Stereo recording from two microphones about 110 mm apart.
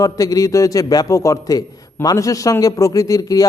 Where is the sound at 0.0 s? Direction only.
30° left (ahead or behind).